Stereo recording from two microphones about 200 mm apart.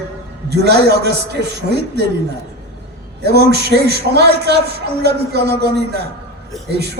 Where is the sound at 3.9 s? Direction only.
55° right (ahead or behind).